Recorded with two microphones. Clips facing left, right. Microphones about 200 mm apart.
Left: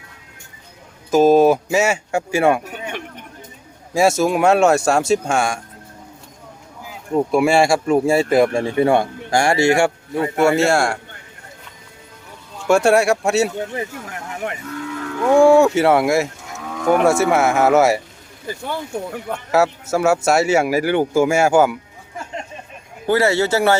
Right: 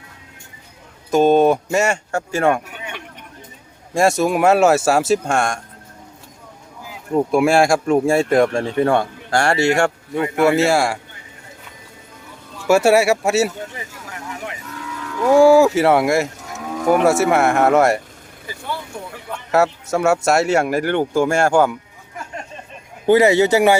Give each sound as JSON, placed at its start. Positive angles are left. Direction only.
{"t": 1.1, "sound": "a man's voice", "side_deg": 5}
{"t": 2.6, "sound": "a sound", "side_deg": 40}
{"t": 3.9, "sound": "speech", "side_deg": 0}
{"t": 7.1, "sound": "speech", "side_deg": 0}
{"t": 10.3, "sound": "speech", "side_deg": 0}
{"t": 12.6, "sound": "speech", "side_deg": -5}
{"t": 14.8, "sound": "livestock", "side_deg": 40}
{"t": 15.3, "sound": "speech", "side_deg": -5}
{"t": 19.5, "sound": "speech", "side_deg": 0}
{"t": 23.0, "sound": "speech", "side_deg": -20}